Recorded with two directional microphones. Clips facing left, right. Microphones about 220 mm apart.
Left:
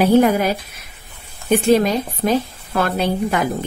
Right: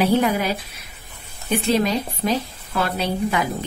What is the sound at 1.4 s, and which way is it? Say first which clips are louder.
A woman's voice: left 5 dB; 50° left (ahead or behind).